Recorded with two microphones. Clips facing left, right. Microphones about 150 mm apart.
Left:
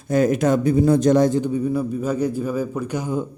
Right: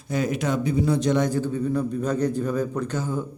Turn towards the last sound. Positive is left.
turn(degrees=15)  # may be behind; listen again after turning